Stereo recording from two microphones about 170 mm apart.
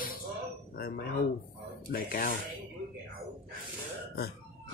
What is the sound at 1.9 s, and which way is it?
Speech, 55° left (ahead or behind).